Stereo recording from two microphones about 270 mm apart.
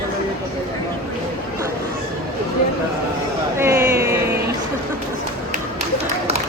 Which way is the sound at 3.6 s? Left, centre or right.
Centre.